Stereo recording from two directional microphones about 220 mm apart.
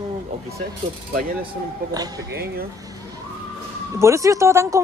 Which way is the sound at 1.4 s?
15° right (ahead or behind).